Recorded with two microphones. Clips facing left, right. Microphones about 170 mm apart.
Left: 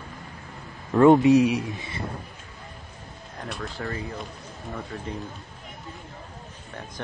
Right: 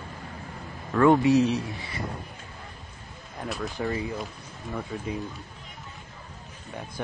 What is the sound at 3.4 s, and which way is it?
Speech, 10° right (ahead or behind).